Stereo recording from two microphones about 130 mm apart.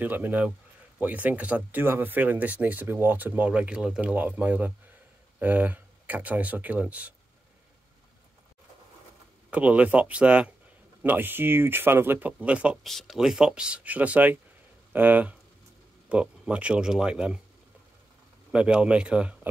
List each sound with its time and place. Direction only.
0.0 s speech: 15° right (ahead or behind)
9.5 s speech: 10° right (ahead or behind)
12.8 s speech: centre (ahead or behind)
18.5 s speech: 10° right (ahead or behind)